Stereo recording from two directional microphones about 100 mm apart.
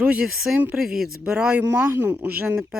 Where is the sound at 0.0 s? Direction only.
10° right (ahead or behind).